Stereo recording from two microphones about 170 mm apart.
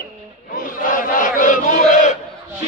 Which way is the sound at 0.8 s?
50° left (ahead or behind).